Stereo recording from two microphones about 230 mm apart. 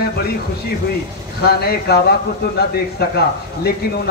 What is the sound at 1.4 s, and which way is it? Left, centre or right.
Speech, left.